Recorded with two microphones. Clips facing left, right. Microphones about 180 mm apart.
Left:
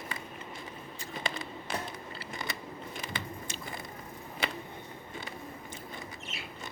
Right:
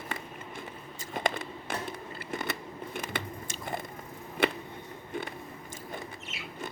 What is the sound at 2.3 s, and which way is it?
Biting, 60° right (ahead or behind).